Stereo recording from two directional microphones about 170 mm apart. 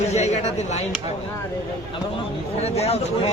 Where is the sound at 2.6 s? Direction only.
40° left (ahead or behind).